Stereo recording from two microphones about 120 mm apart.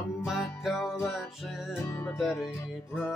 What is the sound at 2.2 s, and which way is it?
Music, 5° right (ahead or behind).